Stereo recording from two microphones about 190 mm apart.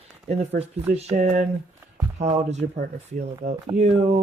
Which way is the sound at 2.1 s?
35° right (ahead or behind).